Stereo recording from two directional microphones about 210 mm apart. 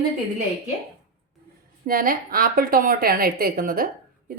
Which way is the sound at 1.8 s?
45° right (ahead or behind).